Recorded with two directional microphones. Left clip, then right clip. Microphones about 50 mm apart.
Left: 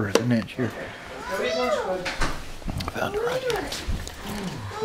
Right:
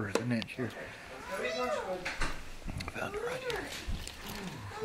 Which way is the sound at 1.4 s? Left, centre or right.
Right.